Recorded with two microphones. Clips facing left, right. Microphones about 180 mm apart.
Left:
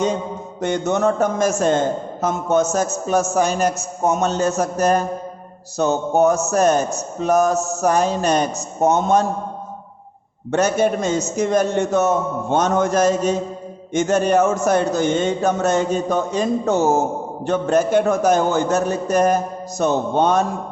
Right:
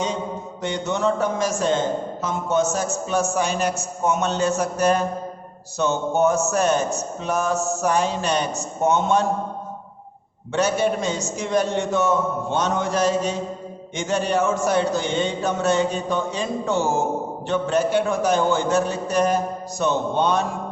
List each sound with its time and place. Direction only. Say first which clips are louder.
0.6 s a man's voice: left 5 dB; 45° left (ahead or behind)
10.5 s a man's voice: left 3 dB; 45° left (ahead or behind)